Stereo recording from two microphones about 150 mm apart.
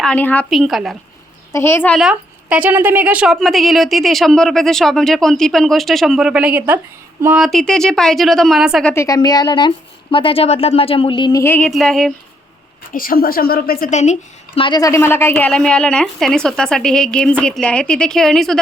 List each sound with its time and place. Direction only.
0.0 s a woman's voice: 10° left (ahead or behind)
0.5 s speech: centre (ahead or behind)
1.5 s a woman's voice: 15° left (ahead or behind)
2.0 s speech: 5° right (ahead or behind)
7.3 s speech: centre (ahead or behind)
8.9 s a woman's voice: 20° left (ahead or behind)
11.7 s speech: 5° left (ahead or behind)
12.9 s a woman's voice: 70° left (ahead or behind)
13.9 s a woman's voice: 50° left (ahead or behind)
14.6 s a woman's voice: 25° left (ahead or behind); by 18.6 s 5° left (ahead or behind)